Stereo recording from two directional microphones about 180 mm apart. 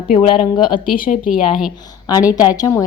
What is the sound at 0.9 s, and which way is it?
Speech, 50° left (ahead or behind).